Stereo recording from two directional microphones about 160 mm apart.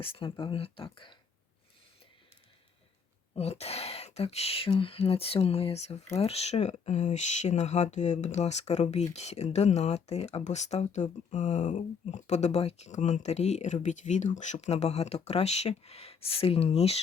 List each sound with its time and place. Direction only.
0.1 s speech: 35° left (ahead or behind)
3.3 s speech: 40° left (ahead or behind)